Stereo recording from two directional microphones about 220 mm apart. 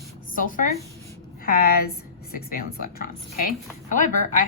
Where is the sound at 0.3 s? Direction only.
40° left (ahead or behind).